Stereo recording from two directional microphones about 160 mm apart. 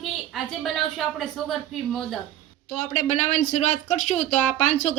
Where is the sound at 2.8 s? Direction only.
45° left (ahead or behind).